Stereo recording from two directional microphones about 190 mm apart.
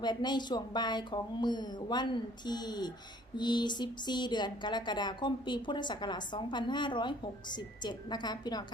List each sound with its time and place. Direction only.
0.0 s speech: 25° left (ahead or behind)